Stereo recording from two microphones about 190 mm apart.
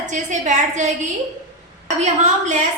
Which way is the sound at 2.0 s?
35° right (ahead or behind).